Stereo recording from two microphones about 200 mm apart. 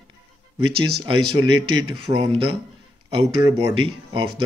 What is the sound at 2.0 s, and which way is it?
Speech, 30° right (ahead or behind).